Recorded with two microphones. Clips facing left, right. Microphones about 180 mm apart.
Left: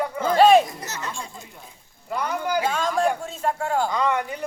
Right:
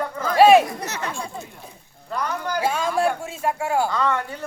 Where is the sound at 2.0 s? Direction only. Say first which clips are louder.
Left 1 dB; 10° left (ahead or behind).